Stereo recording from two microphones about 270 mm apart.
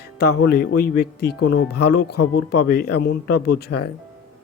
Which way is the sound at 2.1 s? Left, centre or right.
Left.